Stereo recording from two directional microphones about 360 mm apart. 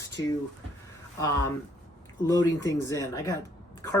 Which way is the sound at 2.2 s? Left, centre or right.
Centre.